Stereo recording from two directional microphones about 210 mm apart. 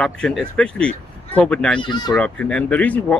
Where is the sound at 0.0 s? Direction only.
5° left (ahead or behind).